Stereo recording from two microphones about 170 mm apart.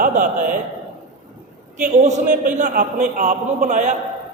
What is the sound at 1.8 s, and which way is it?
A man's voice, 45° right (ahead or behind).